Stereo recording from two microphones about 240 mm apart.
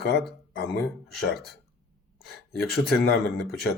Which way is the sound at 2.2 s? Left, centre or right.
Centre.